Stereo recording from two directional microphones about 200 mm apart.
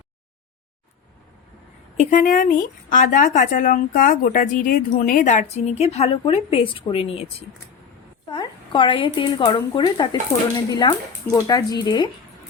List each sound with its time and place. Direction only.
2.0 s speech: 40° left (ahead or behind); by 12.1 s 20° left (ahead or behind)